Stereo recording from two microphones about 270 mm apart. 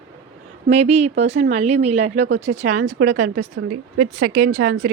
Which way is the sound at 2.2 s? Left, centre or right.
Right.